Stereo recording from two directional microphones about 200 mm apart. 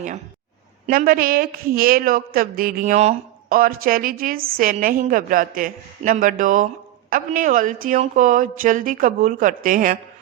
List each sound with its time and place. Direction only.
0.9 s a woman's voice: 45° right (ahead or behind)